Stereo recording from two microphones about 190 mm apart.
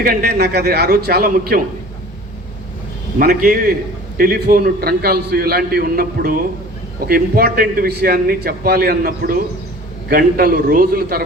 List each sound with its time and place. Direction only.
0.0 s a man's voice: 50° right (ahead or behind)
3.2 s a man's voice: 45° right (ahead or behind)